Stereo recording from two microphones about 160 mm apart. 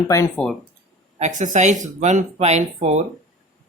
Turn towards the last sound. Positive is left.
turn(degrees=-45)  # may be behind; listen again after turning